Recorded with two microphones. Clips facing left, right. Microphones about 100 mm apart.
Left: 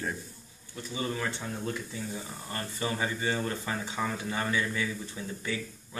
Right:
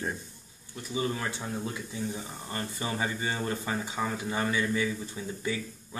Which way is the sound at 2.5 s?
20° right (ahead or behind).